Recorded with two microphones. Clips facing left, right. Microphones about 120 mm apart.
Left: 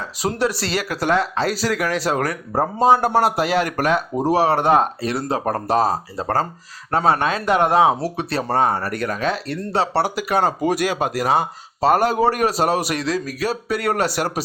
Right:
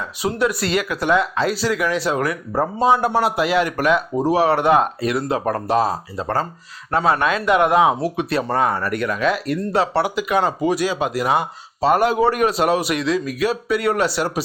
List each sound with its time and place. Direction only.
0.0 s speech: 35° left (ahead or behind)